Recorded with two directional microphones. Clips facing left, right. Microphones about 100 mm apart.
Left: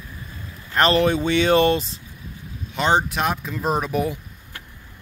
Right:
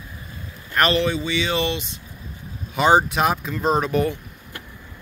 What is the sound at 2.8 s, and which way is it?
Speech, 5° right (ahead or behind).